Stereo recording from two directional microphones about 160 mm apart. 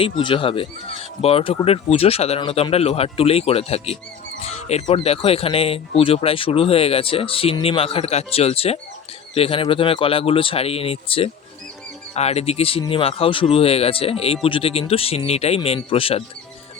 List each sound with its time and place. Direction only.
0.0 s speech: 35° left (ahead or behind)